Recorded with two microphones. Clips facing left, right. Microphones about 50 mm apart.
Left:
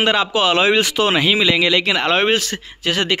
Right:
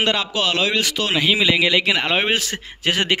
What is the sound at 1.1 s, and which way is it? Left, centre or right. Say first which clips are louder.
A man's voice: right 1 dB; centre.